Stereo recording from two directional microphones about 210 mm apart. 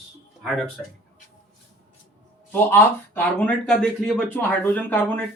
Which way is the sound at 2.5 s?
10° left (ahead or behind).